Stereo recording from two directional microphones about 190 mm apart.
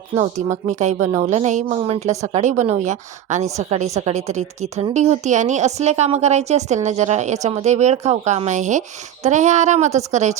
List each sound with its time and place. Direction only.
0.1 s a woman's voice: 35° right (ahead or behind)